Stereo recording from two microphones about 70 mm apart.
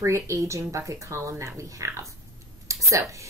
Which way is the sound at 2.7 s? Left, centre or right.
Right.